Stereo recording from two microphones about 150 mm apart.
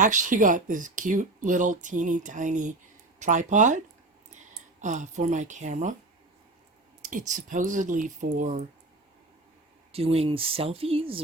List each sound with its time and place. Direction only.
0.0 s speech: 60° right (ahead or behind)
4.8 s speech: 55° right (ahead or behind)
7.0 s speech: 60° right (ahead or behind)
9.9 s speech: 40° right (ahead or behind)